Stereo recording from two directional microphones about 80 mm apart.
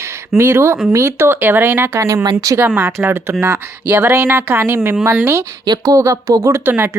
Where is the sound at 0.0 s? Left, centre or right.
Right.